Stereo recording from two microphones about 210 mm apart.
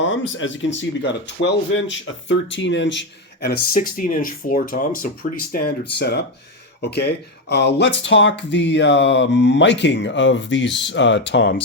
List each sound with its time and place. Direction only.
0.0 s speech: 65° left (ahead or behind)